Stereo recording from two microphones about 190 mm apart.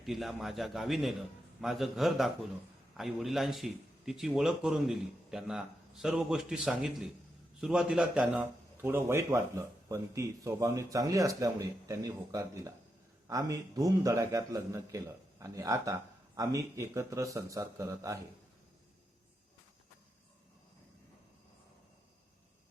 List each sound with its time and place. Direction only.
0.0 s a man's voice: centre (ahead or behind); by 18.2 s 15° right (ahead or behind)